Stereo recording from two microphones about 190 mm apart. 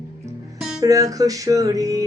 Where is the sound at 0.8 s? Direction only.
20° right (ahead or behind).